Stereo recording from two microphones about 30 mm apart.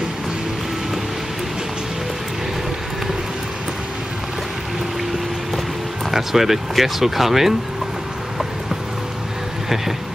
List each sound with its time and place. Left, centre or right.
6.1 s speech: centre